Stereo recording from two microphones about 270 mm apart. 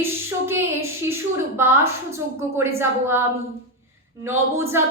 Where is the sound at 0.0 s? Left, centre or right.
Centre.